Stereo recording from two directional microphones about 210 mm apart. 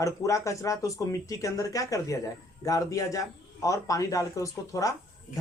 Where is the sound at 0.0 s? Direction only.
15° left (ahead or behind).